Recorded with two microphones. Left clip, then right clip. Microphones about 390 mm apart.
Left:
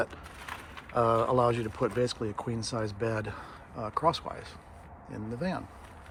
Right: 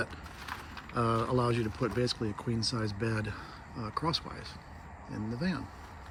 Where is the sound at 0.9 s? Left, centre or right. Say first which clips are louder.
Left 5 dB; centre.